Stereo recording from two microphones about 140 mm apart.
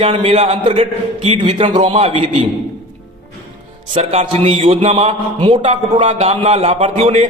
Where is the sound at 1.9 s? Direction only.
50° right (ahead or behind).